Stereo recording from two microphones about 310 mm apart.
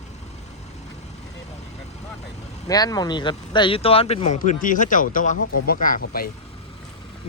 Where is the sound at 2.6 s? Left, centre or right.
Centre.